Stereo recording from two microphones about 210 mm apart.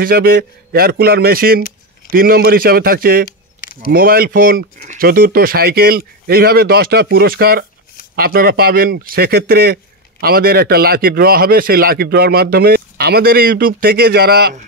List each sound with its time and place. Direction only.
0.0 s a man's voice: 45° right (ahead or behind)